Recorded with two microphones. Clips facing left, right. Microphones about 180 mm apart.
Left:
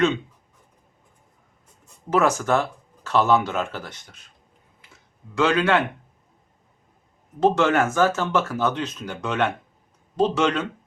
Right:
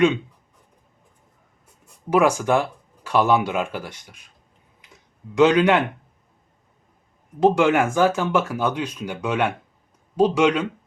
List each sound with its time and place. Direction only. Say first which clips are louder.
1.8 s speech: right 2 dB; 10° right (ahead or behind)
4.8 s a sound: right 5 dB; 15° right (ahead or behind)
7.3 s speech: right 2 dB; 10° right (ahead or behind)